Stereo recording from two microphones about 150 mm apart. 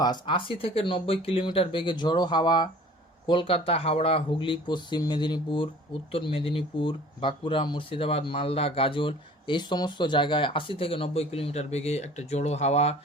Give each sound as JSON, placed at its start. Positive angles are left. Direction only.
{"t": 0.0, "sound": "speech", "side_deg": 30}